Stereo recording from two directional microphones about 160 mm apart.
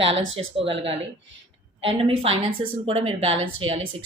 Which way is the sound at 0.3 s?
35° right (ahead or behind).